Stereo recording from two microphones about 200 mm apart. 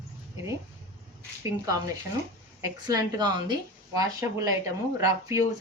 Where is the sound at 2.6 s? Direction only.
20° right (ahead or behind).